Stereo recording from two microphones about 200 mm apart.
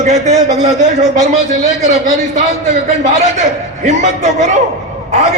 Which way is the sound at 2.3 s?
35° right (ahead or behind).